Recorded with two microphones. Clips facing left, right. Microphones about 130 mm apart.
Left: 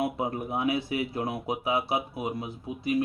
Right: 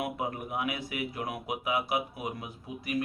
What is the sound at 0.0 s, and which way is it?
Speech, 30° left (ahead or behind).